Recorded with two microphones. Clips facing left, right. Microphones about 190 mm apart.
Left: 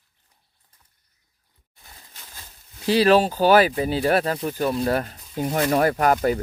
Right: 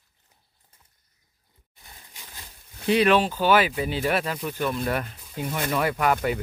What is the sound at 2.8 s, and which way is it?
Speech, 35° left (ahead or behind).